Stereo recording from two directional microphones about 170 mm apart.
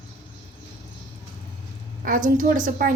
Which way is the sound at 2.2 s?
50° right (ahead or behind).